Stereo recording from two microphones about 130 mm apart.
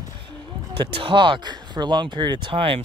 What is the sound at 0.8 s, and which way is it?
Speech, 40° right (ahead or behind).